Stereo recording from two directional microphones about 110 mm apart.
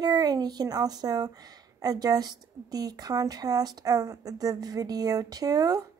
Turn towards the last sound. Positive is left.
turn(degrees=-35)  # may be behind; listen again after turning